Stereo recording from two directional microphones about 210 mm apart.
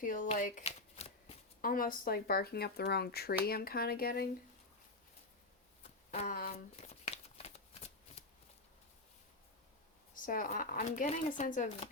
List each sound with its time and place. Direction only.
0.0 s speech: 40° left (ahead or behind)
5.8 s a sound: 35° left (ahead or behind)
10.2 s speech: 40° left (ahead or behind)